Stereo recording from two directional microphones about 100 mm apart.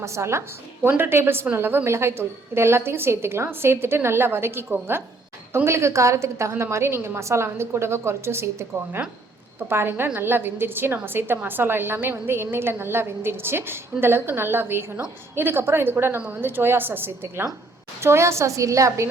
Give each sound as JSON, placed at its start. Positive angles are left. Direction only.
{"t": 0.0, "sound": "a woman's voice", "side_deg": -30}